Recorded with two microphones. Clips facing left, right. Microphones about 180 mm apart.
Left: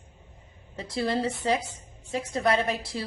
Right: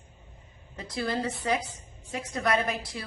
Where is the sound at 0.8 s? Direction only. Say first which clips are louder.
Left 3 dB; 25° left (ahead or behind).